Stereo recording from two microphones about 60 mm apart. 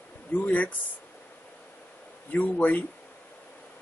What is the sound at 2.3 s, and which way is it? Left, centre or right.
Speech, left.